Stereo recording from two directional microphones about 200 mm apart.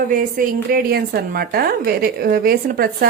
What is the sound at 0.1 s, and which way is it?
A woman's voice, 45° right (ahead or behind).